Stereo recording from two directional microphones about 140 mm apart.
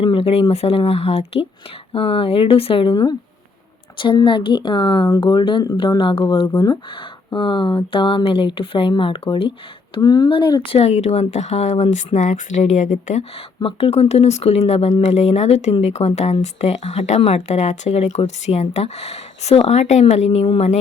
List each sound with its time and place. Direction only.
0.0 s speech: 40° left (ahead or behind)
9.9 s speech: 30° left (ahead or behind); by 13.2 s 60° left (ahead or behind)
13.6 s speech: 40° left (ahead or behind)